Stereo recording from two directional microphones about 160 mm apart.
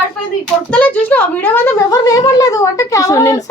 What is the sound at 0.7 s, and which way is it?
Speech, 10° left (ahead or behind).